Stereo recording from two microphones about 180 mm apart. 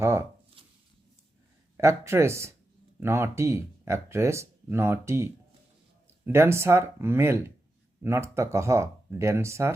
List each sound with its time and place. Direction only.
0.0 s speech: 15° right (ahead or behind)
0.6 s a sound: 30° right (ahead or behind)
1.7 s speech: 15° right (ahead or behind)